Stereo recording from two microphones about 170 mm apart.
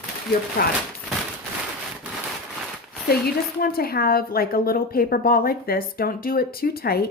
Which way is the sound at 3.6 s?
65° left (ahead or behind).